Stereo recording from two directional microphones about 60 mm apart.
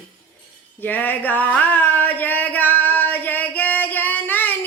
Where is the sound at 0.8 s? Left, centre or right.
Left.